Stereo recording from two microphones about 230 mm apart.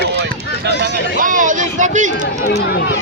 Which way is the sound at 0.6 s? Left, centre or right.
Right.